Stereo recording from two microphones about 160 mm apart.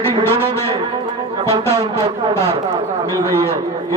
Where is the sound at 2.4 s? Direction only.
25° right (ahead or behind).